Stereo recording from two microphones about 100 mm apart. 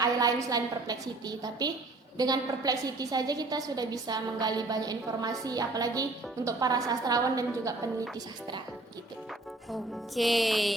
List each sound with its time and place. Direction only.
0.0 s a woman's voice: 35° right (ahead or behind)
9.7 s music: centre (ahead or behind)